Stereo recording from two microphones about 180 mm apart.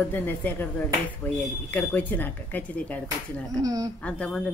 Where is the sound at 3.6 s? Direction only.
20° right (ahead or behind).